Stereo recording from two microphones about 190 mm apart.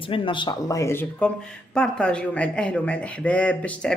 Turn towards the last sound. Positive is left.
turn(degrees=5)  # may be behind; listen again after turning